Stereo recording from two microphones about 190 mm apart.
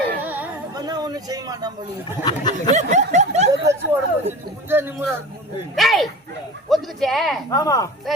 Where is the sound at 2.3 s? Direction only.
20° left (ahead or behind).